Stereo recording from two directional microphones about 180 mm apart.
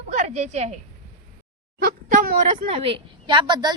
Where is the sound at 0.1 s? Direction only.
40° right (ahead or behind).